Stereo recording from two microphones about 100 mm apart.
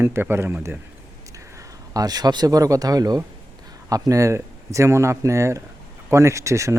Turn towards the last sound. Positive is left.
turn(degrees=-30)  # may be behind; listen again after turning